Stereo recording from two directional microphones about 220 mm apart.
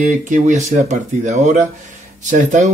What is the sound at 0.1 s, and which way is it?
Speech, 35° right (ahead or behind).